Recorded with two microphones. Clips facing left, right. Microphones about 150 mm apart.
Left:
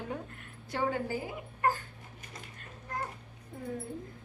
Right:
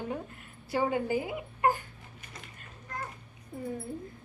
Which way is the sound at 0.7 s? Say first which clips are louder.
Right 4 dB; 15° right (ahead or behind).